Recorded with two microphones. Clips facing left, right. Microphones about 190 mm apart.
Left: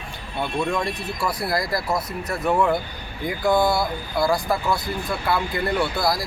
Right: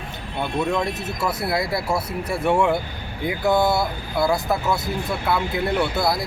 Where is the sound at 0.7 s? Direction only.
5° right (ahead or behind).